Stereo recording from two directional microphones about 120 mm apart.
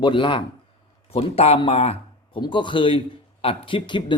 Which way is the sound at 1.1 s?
55° left (ahead or behind).